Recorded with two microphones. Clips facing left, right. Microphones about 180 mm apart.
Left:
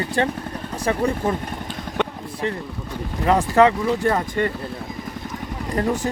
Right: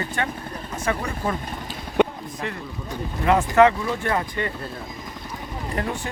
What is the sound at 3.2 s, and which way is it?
Speech, 35° left (ahead or behind).